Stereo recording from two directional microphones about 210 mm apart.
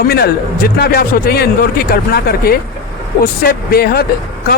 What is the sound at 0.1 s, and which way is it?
Speech, 50° left (ahead or behind).